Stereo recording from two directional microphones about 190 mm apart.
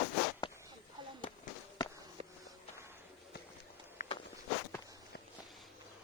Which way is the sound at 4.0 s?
45° left (ahead or behind).